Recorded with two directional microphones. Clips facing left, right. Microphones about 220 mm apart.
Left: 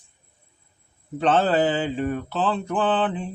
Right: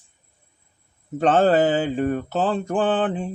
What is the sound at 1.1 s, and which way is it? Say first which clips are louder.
Mantra: right 3 dB; 45° right (ahead or behind).